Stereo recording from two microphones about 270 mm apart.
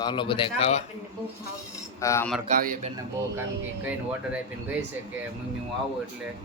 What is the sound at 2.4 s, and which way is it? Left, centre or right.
Speech, right.